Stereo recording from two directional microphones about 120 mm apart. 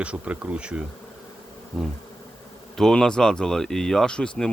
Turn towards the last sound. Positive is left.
turn(degrees=5)  # may be behind; listen again after turning